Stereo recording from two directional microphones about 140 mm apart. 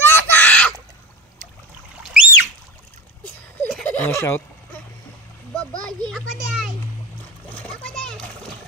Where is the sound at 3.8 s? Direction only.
15° left (ahead or behind).